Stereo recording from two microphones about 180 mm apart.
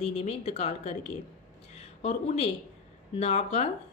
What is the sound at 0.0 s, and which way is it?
Speech, 35° left (ahead or behind).